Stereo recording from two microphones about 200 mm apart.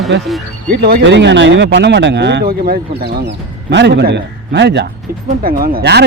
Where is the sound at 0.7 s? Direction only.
55° right (ahead or behind).